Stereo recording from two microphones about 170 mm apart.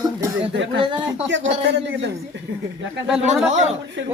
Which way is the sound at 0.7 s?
30° right (ahead or behind).